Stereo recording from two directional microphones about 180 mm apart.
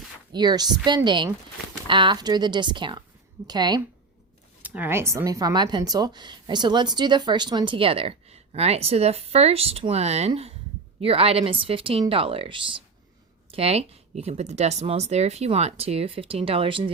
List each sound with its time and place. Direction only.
0.3 s speech: 25° right (ahead or behind)
4.6 s speech: 10° right (ahead or behind); by 16.9 s 30° right (ahead or behind)